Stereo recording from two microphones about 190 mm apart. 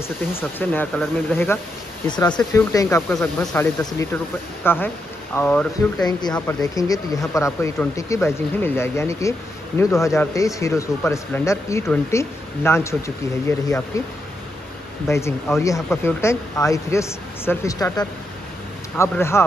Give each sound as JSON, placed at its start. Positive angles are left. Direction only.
{"t": 0.3, "sound": "speech", "side_deg": 10}
{"t": 15.0, "sound": "speech", "side_deg": 15}